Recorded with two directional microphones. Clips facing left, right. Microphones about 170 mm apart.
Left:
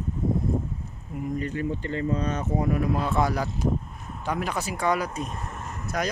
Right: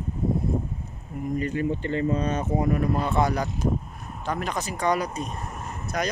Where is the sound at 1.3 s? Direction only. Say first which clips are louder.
Right 4 dB; 15° right (ahead or behind).